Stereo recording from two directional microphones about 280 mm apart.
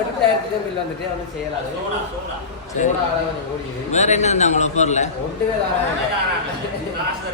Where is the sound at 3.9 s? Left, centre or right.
Left.